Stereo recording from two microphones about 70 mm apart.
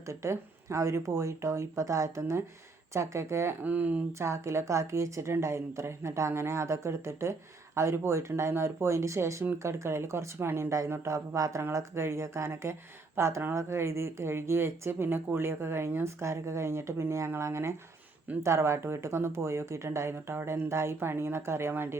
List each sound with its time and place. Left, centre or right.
0.1 s a woman's voice: right
3.6 s speech: right
4.2 s a woman's voice: right